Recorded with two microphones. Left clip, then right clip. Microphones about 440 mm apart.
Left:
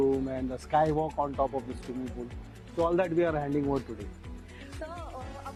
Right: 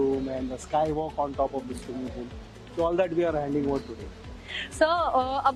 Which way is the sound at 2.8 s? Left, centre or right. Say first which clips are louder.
Right 2 dB; left.